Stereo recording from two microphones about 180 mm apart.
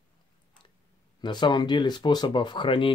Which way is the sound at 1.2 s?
25° left (ahead or behind).